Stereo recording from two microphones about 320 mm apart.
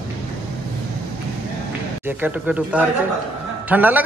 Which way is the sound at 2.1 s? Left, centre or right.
Centre.